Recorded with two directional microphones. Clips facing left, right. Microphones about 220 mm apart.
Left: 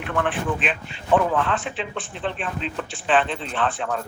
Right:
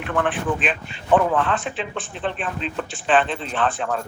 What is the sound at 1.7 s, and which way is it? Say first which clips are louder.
Speech: right 1 dB; 45° right (ahead or behind).